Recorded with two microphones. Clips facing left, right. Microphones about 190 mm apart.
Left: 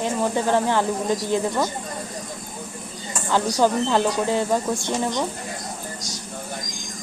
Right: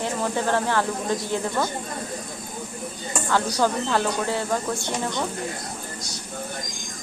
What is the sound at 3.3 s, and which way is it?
A woman's voice, 15° left (ahead or behind).